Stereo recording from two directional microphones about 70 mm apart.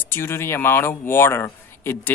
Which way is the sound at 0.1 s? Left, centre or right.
Left.